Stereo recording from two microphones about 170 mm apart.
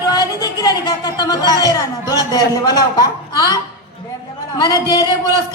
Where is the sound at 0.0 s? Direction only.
20° left (ahead or behind).